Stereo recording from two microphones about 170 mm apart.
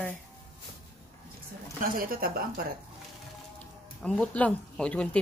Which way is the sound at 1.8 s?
60° right (ahead or behind).